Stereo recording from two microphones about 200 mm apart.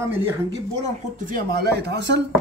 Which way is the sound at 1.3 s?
55° right (ahead or behind).